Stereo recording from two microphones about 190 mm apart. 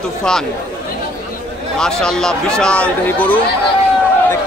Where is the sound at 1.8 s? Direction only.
5° left (ahead or behind).